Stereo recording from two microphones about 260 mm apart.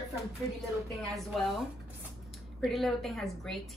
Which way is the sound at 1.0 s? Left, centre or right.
Centre.